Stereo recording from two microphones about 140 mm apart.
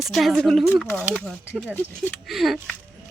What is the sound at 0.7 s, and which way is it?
Speech, 10° right (ahead or behind).